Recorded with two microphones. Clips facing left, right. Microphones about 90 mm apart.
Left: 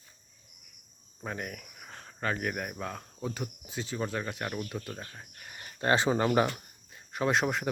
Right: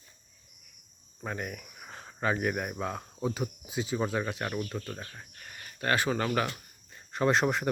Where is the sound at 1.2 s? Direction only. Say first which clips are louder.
Right 1 dB; centre (ahead or behind); by 6.4 s 20° left (ahead or behind).